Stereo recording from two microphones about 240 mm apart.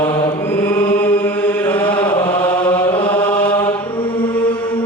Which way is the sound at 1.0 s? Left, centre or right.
Centre.